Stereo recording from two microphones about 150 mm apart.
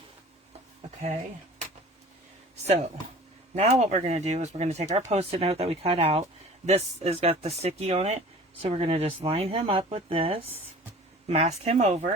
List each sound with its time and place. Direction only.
3.5 s speech: 45° right (ahead or behind)